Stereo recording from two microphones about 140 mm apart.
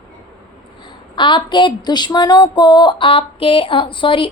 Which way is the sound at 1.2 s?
35° left (ahead or behind).